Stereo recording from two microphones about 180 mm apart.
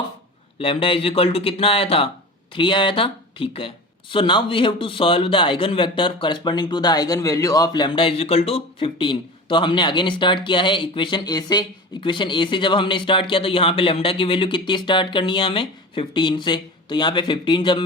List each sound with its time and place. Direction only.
0.6 s speech: 30° left (ahead or behind)